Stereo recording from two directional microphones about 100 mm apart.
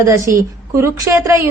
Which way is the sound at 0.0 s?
30° right (ahead or behind).